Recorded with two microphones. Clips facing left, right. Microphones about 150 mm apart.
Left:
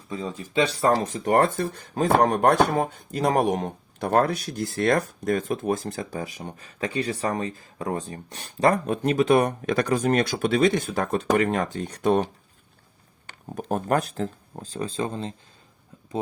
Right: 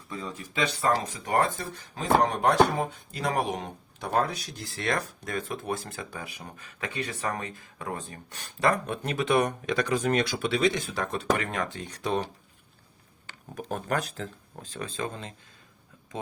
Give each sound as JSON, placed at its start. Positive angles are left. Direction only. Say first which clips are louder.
{"t": 0.1, "sound": "speech", "louder": "left 6 dB", "side_deg": 25}
{"t": 1.2, "sound": "speech", "louder": "left 6 dB", "side_deg": 55}
{"t": 13.6, "sound": "speech", "louder": "left 6 dB", "side_deg": 45}
{"t": 14.5, "sound": "speech", "louder": "left 6 dB", "side_deg": 25}